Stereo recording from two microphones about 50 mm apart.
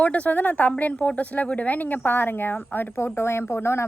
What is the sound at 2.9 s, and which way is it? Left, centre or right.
Speech, left.